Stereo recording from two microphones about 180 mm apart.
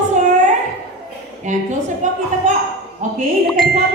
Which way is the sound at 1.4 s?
40° right (ahead or behind).